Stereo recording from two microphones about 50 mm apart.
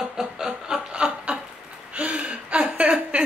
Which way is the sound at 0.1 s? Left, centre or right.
Centre.